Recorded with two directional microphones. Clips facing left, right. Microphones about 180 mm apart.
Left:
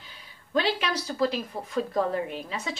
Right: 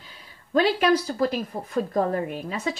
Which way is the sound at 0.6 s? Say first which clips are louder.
Right 7 dB; 50° right (ahead or behind).